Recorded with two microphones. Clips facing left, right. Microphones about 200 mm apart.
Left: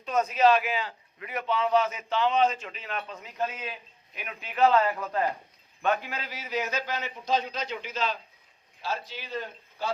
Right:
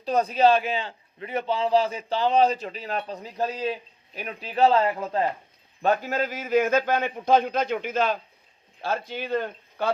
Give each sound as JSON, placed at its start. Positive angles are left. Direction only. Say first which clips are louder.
{"t": 0.0, "sound": "a man's voice", "louder": "right 3 dB", "side_deg": -35}